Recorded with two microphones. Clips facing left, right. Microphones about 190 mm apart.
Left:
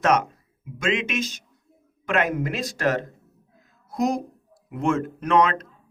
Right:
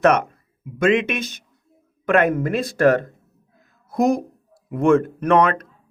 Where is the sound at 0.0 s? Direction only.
60° right (ahead or behind).